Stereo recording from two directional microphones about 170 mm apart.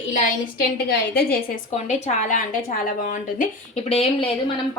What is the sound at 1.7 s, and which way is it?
A woman's voice, 40° left (ahead or behind).